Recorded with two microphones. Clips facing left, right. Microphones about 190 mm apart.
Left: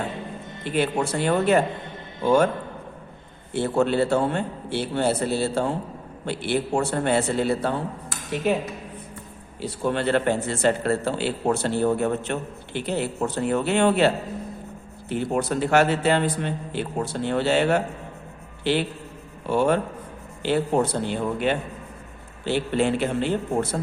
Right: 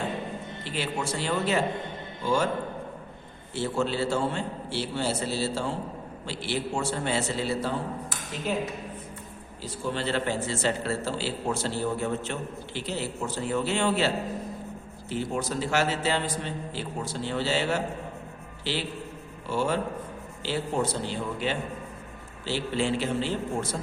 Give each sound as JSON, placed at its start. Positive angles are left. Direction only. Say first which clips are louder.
{"t": 0.6, "sound": "a man's voice", "louder": "left 9 dB", "side_deg": 55}
{"t": 3.5, "sound": "a man's voice", "louder": "left 6 dB", "side_deg": 55}
{"t": 9.6, "sound": "a man's voice", "louder": "left 6 dB", "side_deg": 65}
{"t": 15.1, "sound": "a man's voice", "louder": "left 5 dB", "side_deg": 60}